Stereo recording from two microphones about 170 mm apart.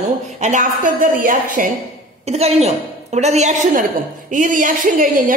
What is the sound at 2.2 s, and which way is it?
A woman's voice, 40° right (ahead or behind).